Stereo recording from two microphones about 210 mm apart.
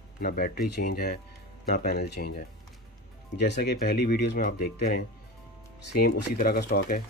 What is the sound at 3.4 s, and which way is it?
Speech, 50° left (ahead or behind).